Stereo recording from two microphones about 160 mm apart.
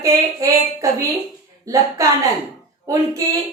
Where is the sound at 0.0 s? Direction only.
20° right (ahead or behind).